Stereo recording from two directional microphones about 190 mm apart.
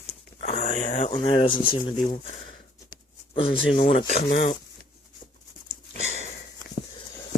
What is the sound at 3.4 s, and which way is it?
Speech, 25° left (ahead or behind).